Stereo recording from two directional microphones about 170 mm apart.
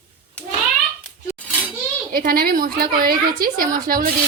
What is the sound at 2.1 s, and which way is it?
A woman's voice, 60° right (ahead or behind).